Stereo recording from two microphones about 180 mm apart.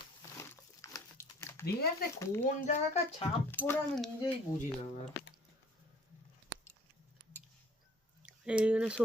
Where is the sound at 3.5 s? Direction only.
10° left (ahead or behind).